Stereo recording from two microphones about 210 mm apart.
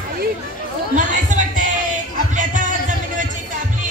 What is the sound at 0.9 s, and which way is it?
Chatter, 35° right (ahead or behind).